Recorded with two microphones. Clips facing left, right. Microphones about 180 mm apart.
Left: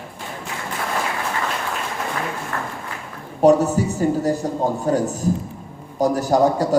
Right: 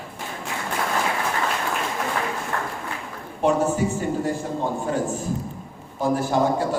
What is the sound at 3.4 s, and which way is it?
A man's voice, 40° left (ahead or behind).